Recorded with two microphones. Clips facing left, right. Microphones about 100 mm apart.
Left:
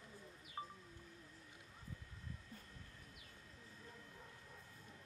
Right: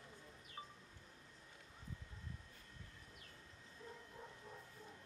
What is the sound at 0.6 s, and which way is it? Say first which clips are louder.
Music: left 5 dB; 30° left (ahead or behind).